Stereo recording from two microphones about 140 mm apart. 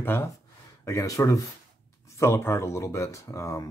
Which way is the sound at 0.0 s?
15° left (ahead or behind).